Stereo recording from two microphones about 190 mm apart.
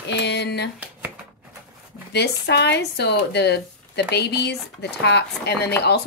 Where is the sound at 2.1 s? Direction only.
60° left (ahead or behind).